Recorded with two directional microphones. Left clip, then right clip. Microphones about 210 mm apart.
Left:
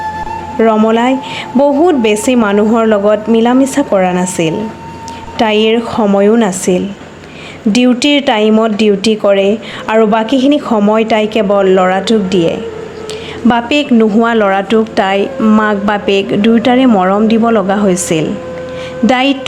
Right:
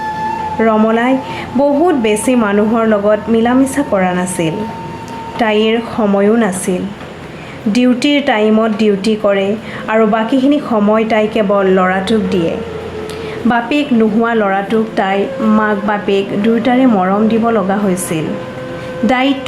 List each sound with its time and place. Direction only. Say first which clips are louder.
0.6 s speech: left 3 dB; 35° left (ahead or behind)